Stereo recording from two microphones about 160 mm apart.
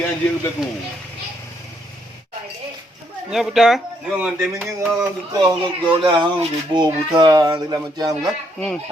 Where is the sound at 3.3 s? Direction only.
Centre (ahead or behind).